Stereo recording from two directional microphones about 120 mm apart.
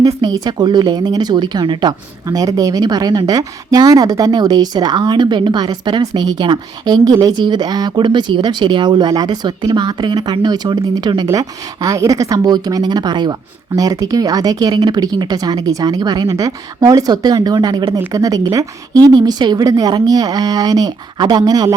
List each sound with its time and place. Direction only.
0.0 s speech: 35° right (ahead or behind)